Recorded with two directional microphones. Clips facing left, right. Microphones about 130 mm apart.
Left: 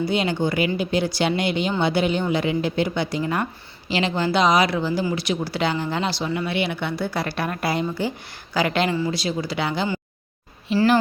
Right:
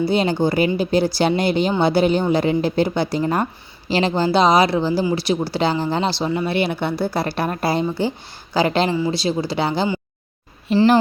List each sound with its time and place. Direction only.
0.0 s speech: 35° right (ahead or behind)